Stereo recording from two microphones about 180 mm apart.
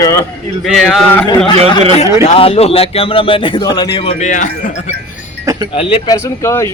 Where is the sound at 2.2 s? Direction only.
35° left (ahead or behind).